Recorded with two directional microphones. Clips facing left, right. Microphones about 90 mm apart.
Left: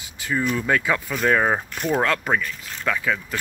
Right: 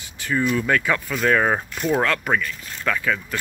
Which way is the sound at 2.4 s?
15° left (ahead or behind).